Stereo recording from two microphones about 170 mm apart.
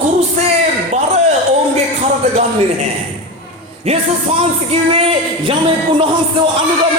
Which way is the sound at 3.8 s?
35° right (ahead or behind).